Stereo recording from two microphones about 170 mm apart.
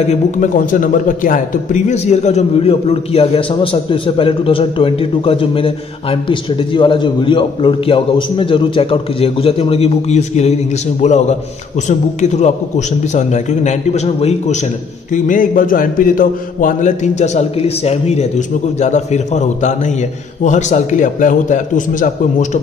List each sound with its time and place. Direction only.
0.0 s a man's voice: 45° left (ahead or behind)
15.1 s a man's voice: 50° left (ahead or behind)